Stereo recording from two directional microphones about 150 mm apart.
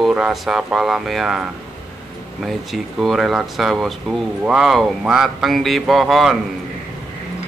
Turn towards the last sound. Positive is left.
turn(degrees=0)  # may be behind; listen again after turning